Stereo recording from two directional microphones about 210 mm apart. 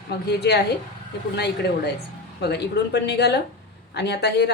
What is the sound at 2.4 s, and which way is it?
Speech, 50° left (ahead or behind).